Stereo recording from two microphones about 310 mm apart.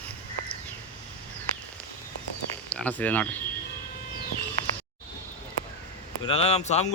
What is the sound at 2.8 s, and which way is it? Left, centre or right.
Speech, centre.